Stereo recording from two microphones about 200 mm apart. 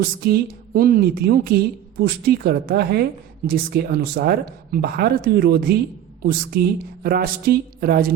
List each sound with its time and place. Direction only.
0.0 s a woman's voice: 50° right (ahead or behind)